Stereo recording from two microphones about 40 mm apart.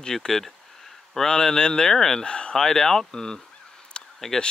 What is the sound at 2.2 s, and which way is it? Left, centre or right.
Speech, left.